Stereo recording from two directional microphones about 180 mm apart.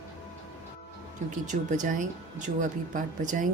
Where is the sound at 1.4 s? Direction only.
45° right (ahead or behind).